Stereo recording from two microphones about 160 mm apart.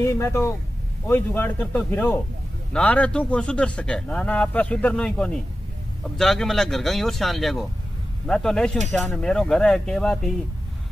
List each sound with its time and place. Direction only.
0.0 s speech: 15° left (ahead or behind)